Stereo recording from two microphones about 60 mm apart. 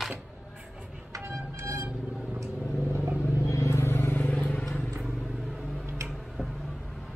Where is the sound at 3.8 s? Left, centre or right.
Left.